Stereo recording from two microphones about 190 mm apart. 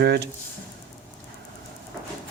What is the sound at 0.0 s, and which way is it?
Speech, 55° right (ahead or behind).